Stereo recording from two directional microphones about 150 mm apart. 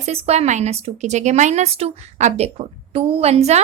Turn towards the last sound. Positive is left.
turn(degrees=-45)  # may be behind; listen again after turning